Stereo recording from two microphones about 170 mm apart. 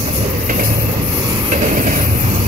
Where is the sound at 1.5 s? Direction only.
45° right (ahead or behind).